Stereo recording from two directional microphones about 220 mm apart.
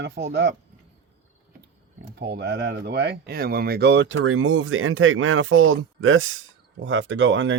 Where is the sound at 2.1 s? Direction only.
50° right (ahead or behind).